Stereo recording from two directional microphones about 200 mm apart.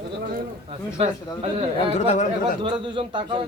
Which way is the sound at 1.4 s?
30° right (ahead or behind).